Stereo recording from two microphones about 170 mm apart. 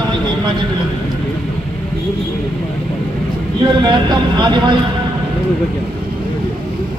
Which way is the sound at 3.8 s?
25° right (ahead or behind).